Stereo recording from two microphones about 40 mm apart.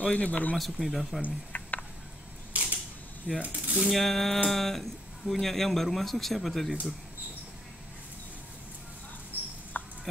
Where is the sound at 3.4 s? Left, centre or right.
Right.